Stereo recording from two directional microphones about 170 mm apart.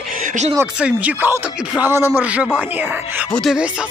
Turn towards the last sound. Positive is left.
turn(degrees=0)  # may be behind; listen again after turning